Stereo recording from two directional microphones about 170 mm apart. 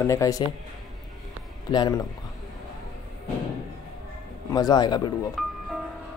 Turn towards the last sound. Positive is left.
turn(degrees=0)  # may be behind; listen again after turning